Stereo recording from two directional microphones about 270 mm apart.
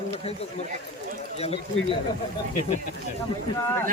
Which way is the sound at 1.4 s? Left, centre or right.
Left.